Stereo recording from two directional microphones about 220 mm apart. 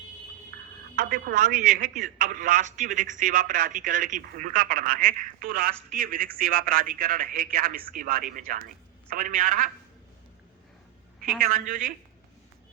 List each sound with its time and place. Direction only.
0.5 s speech: 45° right (ahead or behind)
11.3 s speech: 40° right (ahead or behind)